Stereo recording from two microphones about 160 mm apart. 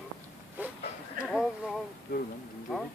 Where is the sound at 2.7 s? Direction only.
Centre (ahead or behind).